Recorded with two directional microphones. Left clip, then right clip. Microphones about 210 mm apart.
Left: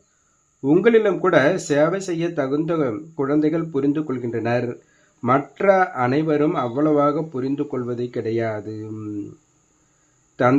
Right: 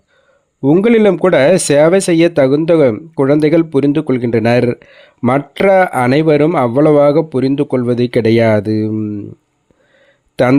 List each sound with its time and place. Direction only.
0.6 s speech: 45° right (ahead or behind)
10.4 s speech: 50° right (ahead or behind)